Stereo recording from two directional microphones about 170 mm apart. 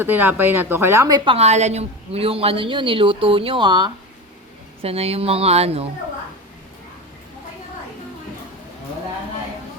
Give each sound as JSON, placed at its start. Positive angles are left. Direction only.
{"t": 0.0, "sound": "a woman's voice", "side_deg": -10}
{"t": 4.8, "sound": "speech", "side_deg": -35}